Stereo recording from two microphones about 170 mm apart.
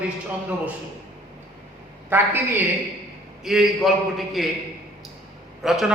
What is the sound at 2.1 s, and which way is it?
Speech, 10° right (ahead or behind).